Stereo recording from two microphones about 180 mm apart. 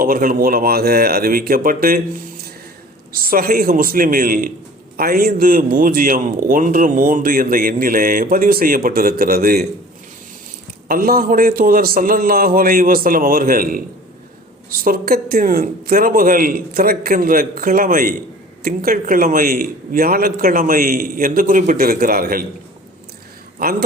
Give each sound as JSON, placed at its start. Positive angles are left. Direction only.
{"t": 0.0, "sound": "speech", "side_deg": -50}
{"t": 3.1, "sound": "speech", "side_deg": -55}
{"t": 10.8, "sound": "speech", "side_deg": -55}